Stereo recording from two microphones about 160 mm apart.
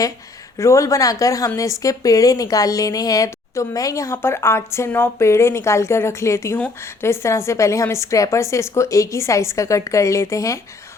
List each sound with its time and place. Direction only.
0.6 s a woman's voice: 20° left (ahead or behind)